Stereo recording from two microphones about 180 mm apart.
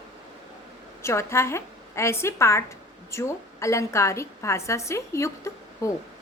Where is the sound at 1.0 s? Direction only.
15° left (ahead or behind).